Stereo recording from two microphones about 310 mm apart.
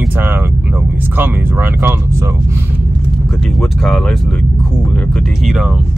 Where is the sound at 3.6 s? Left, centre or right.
Centre.